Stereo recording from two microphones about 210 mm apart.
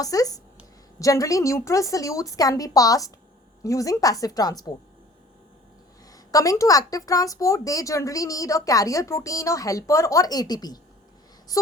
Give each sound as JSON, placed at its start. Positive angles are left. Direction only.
{"t": 0.0, "sound": "speech", "side_deg": 15}
{"t": 6.1, "sound": "speech", "side_deg": 15}